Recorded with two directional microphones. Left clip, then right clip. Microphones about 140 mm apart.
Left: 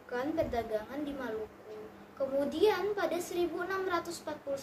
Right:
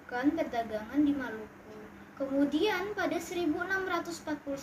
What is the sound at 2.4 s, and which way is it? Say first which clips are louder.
A woman's voice: even; 25° left (ahead or behind).